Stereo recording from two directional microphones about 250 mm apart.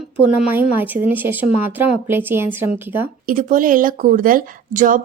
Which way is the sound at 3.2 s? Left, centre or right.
Right.